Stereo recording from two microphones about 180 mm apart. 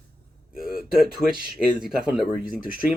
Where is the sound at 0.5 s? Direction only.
5° right (ahead or behind).